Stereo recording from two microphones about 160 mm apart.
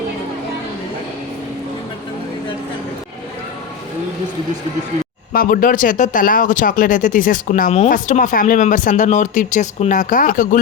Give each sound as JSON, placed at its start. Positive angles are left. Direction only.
{"t": 5.3, "sound": "speech", "side_deg": 65}